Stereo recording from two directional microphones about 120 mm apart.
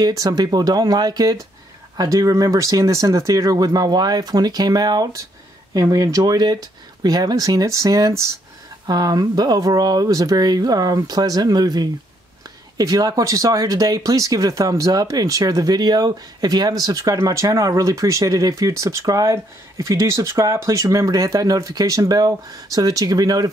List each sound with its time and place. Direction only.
0.0 s speech: 30° right (ahead or behind)